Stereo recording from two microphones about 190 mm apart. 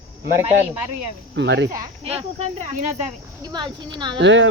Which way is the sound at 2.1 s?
30° right (ahead or behind).